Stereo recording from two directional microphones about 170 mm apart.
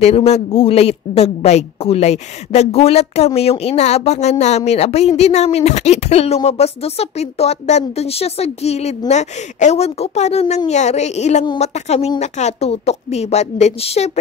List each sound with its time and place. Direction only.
0.0 s speech: 35° left (ahead or behind)